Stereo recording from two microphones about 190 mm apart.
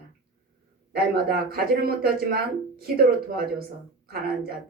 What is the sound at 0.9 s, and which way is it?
Speech, 55° right (ahead or behind).